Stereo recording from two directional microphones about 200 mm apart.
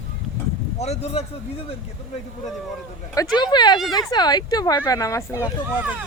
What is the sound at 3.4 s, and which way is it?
Speech, 20° left (ahead or behind).